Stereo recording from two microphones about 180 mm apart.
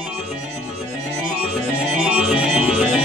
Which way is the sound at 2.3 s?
5° right (ahead or behind).